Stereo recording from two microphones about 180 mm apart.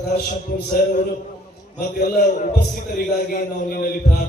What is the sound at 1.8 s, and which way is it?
Mantra, 50° left (ahead or behind).